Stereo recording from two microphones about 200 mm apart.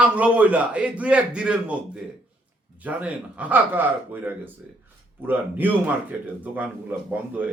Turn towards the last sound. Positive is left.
turn(degrees=-10)  # may be behind; listen again after turning